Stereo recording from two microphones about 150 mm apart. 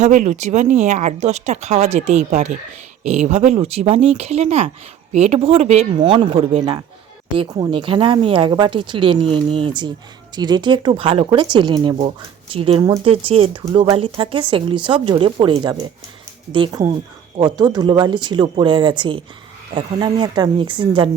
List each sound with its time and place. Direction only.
0.0 s speech: 55° right (ahead or behind)
6.0 s speech: 30° right (ahead or behind)
11.9 s speech: 40° right (ahead or behind)